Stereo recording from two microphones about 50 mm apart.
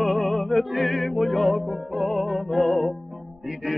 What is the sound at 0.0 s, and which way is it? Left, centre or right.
Music, centre.